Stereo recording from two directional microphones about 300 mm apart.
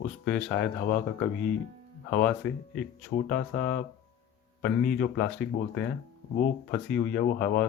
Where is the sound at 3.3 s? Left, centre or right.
Left.